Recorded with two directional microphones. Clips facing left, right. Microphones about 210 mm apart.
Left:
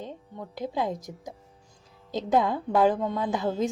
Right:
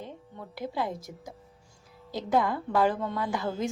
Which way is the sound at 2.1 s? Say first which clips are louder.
Left 2 dB; 20° left (ahead or behind).